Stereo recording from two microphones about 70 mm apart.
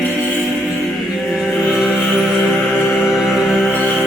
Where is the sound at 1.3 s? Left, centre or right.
Centre.